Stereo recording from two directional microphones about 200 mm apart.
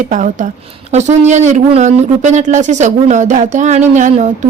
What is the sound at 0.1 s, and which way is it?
A woman's voice, 40° right (ahead or behind).